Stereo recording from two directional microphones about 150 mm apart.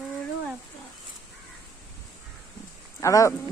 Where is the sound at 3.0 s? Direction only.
20° left (ahead or behind).